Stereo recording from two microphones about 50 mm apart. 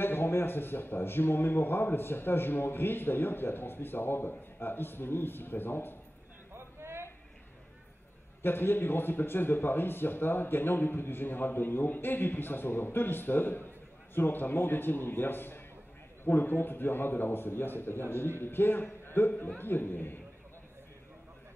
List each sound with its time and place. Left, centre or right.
0.0 s a man's voice: left
6.5 s a sound: right
8.4 s a man's voice: left